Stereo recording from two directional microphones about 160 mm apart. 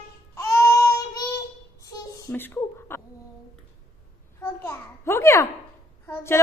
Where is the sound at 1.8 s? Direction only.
20° left (ahead or behind).